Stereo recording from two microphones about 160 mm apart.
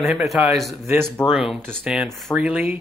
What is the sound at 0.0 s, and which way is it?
Speech, centre (ahead or behind).